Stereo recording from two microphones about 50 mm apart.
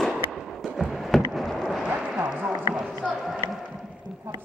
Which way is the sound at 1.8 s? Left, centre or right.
Right.